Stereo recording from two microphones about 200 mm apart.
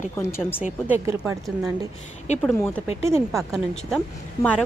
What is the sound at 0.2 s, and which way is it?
Speech, 10° left (ahead or behind).